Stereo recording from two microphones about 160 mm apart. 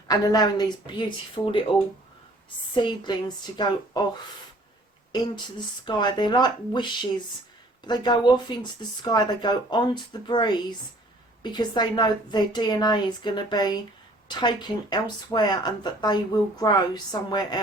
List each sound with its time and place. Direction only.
0.1 s speech: 25° left (ahead or behind)
2.7 s speech: 30° left (ahead or behind)
5.8 s speech: 25° left (ahead or behind)